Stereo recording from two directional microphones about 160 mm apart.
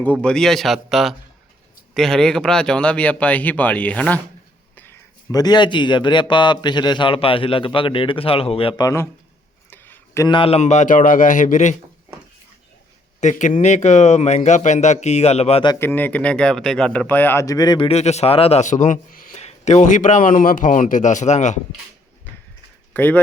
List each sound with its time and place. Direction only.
0.0 s speech: 10° left (ahead or behind)
4.8 s speech: 20° left (ahead or behind); by 8.8 s 35° left (ahead or behind)
8.8 s speech: 20° left (ahead or behind)
9.6 s a sound: 10° left (ahead or behind)
10.2 s speech: 30° left (ahead or behind)
10.6 s speech: 45° left (ahead or behind)
13.1 s speech: 50° left (ahead or behind)
15.8 s speech: 10° left (ahead or behind)
17.8 s speech: 45° left (ahead or behind)
22.9 s speech: 10° left (ahead or behind)